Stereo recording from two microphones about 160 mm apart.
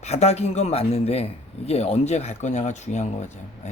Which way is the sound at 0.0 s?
40° left (ahead or behind).